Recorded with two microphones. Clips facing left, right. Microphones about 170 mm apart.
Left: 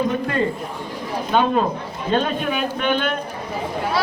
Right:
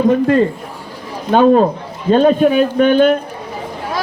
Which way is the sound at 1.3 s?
40° right (ahead or behind).